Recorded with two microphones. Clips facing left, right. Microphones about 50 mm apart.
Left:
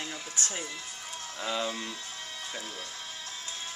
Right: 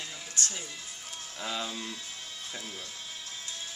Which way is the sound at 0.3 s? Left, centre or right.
Left.